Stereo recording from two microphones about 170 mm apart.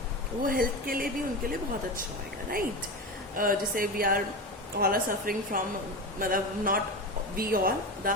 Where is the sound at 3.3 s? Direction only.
55° right (ahead or behind).